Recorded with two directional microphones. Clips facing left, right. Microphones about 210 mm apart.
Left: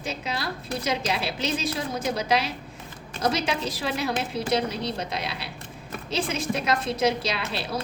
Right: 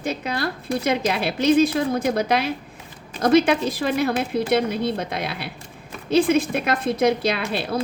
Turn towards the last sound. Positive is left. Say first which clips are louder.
# right 5 dB
turn(degrees=-55)  # may be behind; listen again after turning